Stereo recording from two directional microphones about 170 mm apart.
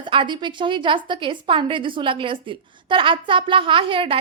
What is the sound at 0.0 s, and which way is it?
A woman's voice, 30° right (ahead or behind).